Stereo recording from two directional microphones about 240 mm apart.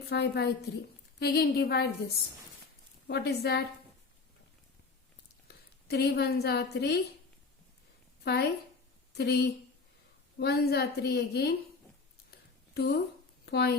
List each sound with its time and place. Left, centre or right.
0.1 s a woman's voice: left
3.1 s a woman's voice: left
5.5 s a woman's voice: left
8.2 s a woman's voice: left
12.7 s a woman's voice: left